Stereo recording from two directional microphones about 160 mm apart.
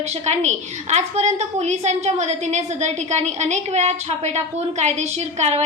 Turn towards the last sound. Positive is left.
turn(degrees=-45)  # may be behind; listen again after turning